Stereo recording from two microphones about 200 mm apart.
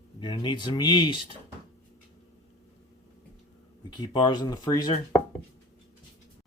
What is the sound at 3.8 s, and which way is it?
Speech, 20° left (ahead or behind).